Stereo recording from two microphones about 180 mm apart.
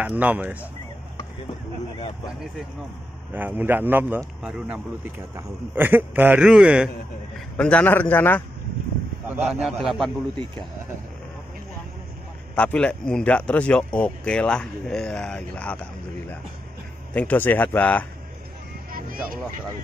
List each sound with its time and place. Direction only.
0.0 s a man's voice: 10° right (ahead or behind)
3.3 s a man's voice: 10° right (ahead or behind)
7.3 s a man's voice: 5° left (ahead or behind)
9.3 s speech: 5° right (ahead or behind)
12.5 s a man's voice: 5° left (ahead or behind)
18.9 s vehicle: 50° right (ahead or behind)